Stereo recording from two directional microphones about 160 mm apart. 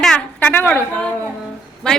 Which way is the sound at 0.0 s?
5° left (ahead or behind).